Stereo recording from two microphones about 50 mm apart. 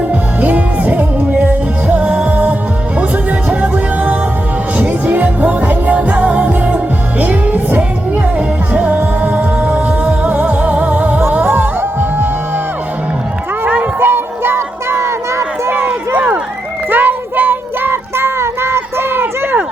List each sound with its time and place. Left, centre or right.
0.1 s music: right
11.4 s music: right
14.0 s music: right
15.9 s run: right
16.9 s child singing: right